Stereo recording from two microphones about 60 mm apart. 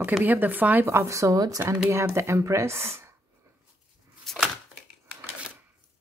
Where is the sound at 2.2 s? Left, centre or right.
Right.